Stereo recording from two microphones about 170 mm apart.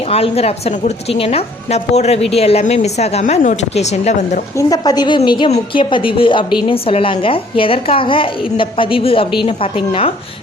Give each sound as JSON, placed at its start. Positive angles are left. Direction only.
{"t": 0.1, "sound": "a woman's voice", "side_deg": 35}
{"t": 4.5, "sound": "a woman's voice", "side_deg": 20}